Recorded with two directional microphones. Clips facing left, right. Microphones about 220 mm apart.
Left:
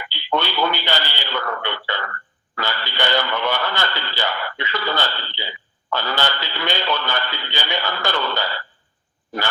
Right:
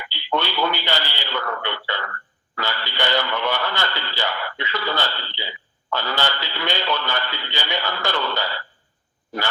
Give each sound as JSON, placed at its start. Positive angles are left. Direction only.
{"t": 0.1, "sound": "speech", "side_deg": 50}